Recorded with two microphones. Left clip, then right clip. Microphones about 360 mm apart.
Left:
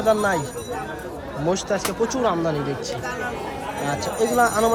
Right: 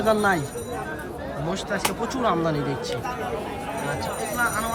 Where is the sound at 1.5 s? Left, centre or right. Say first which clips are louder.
Left 6 dB; centre.